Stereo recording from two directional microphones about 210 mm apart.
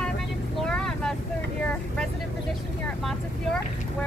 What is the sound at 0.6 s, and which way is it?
Vehicle, 5° left (ahead or behind).